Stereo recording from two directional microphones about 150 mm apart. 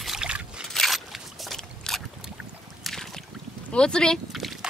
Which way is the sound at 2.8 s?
5° left (ahead or behind).